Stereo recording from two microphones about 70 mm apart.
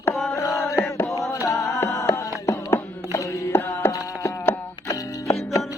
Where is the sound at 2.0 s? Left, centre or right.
Left.